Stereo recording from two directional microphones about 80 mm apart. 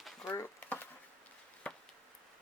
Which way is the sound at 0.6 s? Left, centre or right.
Left.